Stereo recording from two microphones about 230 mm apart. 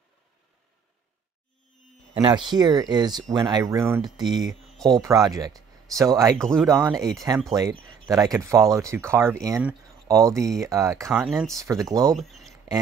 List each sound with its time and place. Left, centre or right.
2.1 s speech: centre
6.3 s speech: centre
6.7 s speech: centre
11.2 s speech: centre
11.5 s speech: centre
12.1 s speech: centre